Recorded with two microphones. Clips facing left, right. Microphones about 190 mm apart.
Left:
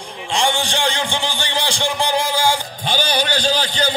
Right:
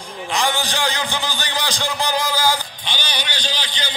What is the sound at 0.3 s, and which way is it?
A man's voice, 30° left (ahead or behind).